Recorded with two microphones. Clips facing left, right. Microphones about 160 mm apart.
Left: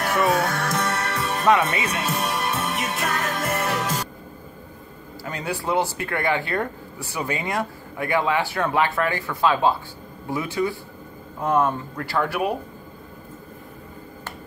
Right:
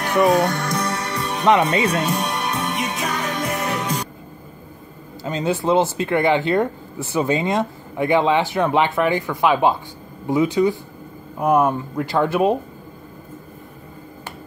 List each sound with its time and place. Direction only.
0.0 s music: centre (ahead or behind)
1.7 s speech: 30° right (ahead or behind)
2.0 s music: centre (ahead or behind)
5.2 s speech: 20° right (ahead or behind)